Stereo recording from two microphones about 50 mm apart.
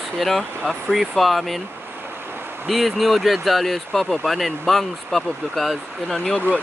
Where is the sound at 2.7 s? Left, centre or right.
Centre.